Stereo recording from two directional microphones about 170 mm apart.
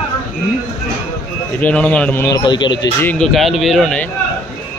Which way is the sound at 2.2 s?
25° left (ahead or behind).